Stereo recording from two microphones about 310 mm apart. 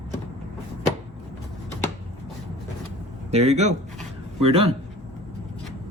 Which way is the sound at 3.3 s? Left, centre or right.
Right.